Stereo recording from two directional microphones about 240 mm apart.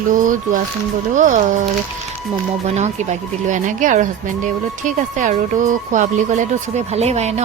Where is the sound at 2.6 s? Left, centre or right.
Right.